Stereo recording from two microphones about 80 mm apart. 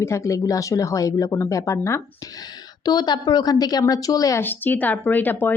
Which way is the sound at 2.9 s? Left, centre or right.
Left.